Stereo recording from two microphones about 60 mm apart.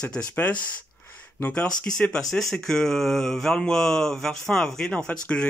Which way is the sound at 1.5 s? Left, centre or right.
Centre.